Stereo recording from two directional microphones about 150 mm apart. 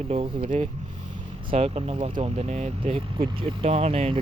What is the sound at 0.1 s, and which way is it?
Speech, 45° right (ahead or behind).